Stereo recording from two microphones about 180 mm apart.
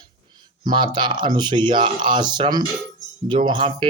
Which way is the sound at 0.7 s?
25° right (ahead or behind).